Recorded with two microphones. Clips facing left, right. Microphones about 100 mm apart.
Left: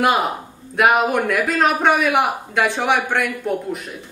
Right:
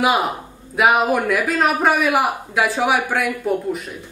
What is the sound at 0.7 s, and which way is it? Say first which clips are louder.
A man's voice: even; centre (ahead or behind).